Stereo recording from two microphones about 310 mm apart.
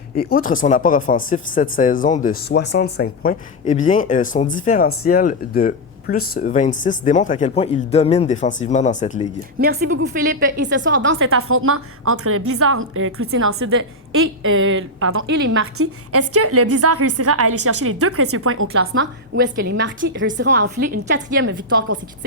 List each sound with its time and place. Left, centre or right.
0.2 s speech: left
9.6 s a woman's voice: right